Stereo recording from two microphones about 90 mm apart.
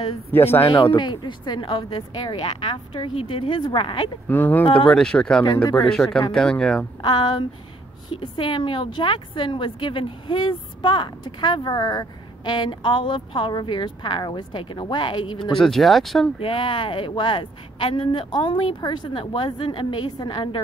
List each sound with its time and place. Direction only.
0.3 s speech: 25° left (ahead or behind)
0.9 s speech: 60° left (ahead or behind)
4.3 s speech: 20° left (ahead or behind)
4.8 s speech: 10° left (ahead or behind)
7.0 s speech: 55° left (ahead or behind)
8.1 s speech: 65° left (ahead or behind)
15.5 s speech: 5° left (ahead or behind)
16.3 s speech: 75° left (ahead or behind)
20.2 s speech: 50° left (ahead or behind)